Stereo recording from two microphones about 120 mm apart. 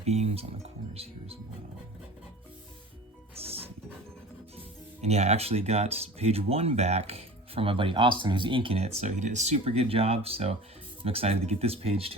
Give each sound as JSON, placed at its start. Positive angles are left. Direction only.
{"t": 0.0, "sound": "speech", "side_deg": -65}
{"t": 3.3, "sound": "music", "side_deg": -55}
{"t": 4.9, "sound": "speech", "side_deg": -65}